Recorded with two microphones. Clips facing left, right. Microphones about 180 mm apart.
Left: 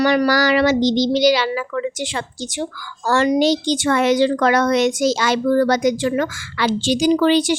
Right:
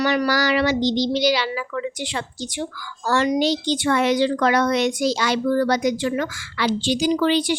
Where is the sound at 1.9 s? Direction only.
85° left.